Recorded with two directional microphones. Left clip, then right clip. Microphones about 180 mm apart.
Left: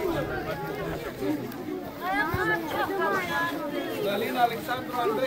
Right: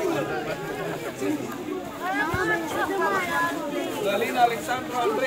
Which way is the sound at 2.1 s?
50° right (ahead or behind).